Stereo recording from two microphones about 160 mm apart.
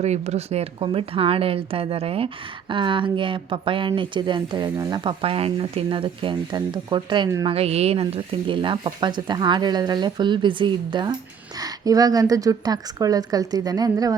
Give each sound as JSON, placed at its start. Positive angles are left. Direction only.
{"t": 0.0, "sound": "speech", "side_deg": -45}
{"t": 5.2, "sound": "speech", "side_deg": -35}